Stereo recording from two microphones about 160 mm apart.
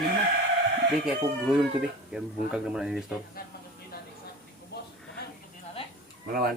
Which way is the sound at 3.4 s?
65° left (ahead or behind).